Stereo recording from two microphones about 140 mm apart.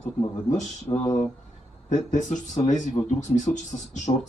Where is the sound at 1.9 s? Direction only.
60° left (ahead or behind).